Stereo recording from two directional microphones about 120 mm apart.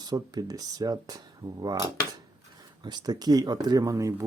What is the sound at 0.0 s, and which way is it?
Speech, 35° right (ahead or behind).